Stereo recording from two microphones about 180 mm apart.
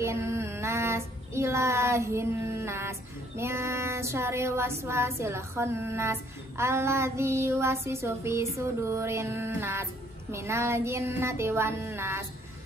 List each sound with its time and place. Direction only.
0.0 s child singing: 15° right (ahead or behind)